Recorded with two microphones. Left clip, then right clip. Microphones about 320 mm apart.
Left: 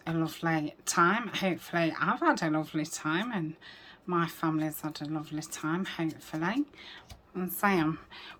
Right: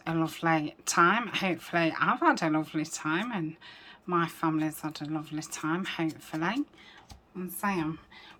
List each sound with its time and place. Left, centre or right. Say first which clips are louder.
0.0 s speech: right 3 dB; centre
7.3 s a woman's voice: left 4 dB; centre